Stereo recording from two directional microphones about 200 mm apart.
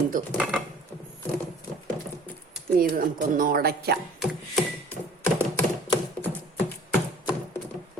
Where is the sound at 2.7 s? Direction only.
45° right (ahead or behind).